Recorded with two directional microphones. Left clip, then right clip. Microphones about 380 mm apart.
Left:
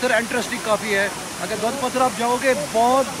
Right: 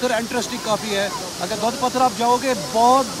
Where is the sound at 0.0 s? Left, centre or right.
Centre.